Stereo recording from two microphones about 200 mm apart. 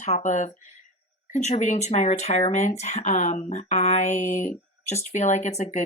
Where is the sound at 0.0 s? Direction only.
35° left (ahead or behind).